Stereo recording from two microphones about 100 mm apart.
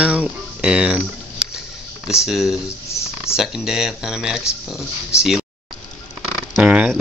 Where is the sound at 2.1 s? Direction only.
5° right (ahead or behind).